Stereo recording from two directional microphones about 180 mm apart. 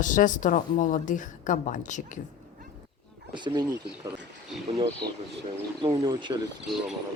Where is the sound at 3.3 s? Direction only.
25° right (ahead or behind).